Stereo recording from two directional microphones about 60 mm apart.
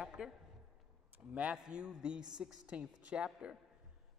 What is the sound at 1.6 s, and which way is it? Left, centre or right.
Mantra, centre.